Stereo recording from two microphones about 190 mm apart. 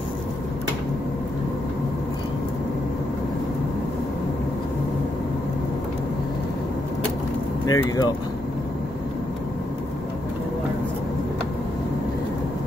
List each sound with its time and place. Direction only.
7.6 s speech: 20° left (ahead or behind)